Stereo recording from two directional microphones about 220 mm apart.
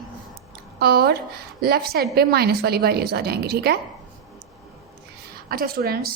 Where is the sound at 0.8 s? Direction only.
45° right (ahead or behind).